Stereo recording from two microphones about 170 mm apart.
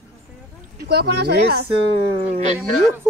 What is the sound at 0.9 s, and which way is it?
Speech, 70° right (ahead or behind).